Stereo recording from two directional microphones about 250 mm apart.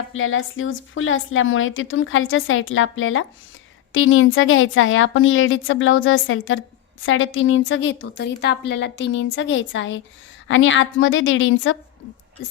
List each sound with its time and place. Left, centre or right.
0.1 s a woman's voice: left